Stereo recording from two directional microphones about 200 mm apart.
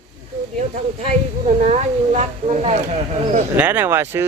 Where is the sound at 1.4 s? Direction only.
35° right (ahead or behind).